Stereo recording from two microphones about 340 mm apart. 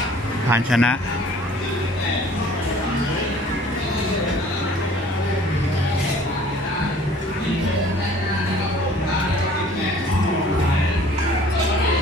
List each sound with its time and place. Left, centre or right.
0.5 s a man's voice: centre